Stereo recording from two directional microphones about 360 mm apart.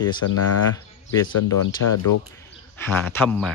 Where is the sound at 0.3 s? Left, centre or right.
Left.